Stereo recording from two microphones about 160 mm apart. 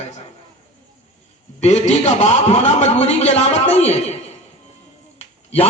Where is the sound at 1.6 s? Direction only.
45° left (ahead or behind).